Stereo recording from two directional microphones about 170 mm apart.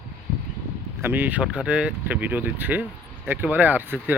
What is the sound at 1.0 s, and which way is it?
Speech, 10° right (ahead or behind).